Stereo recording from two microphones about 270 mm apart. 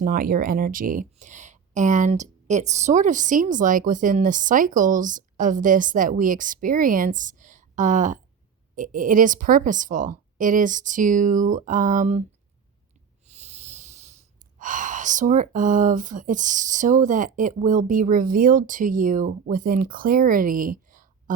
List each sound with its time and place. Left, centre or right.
0.0 s speech: right
13.2 s hiss: right
14.6 s speech: right